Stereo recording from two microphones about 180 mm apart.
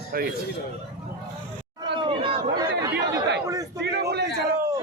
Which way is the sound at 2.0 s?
30° right (ahead or behind).